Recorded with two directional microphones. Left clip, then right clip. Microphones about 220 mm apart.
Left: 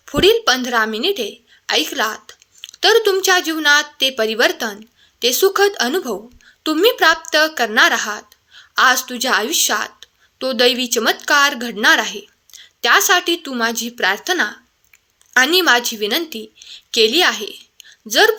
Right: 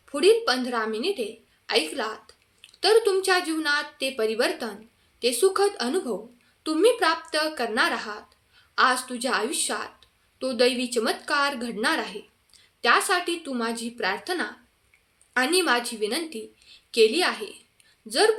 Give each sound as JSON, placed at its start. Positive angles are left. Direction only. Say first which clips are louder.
{"t": 0.0, "sound": "a woman's voice", "louder": "left 7 dB", "side_deg": 35}